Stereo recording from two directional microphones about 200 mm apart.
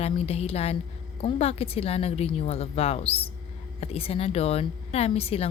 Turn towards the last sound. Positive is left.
turn(degrees=30)  # may be behind; listen again after turning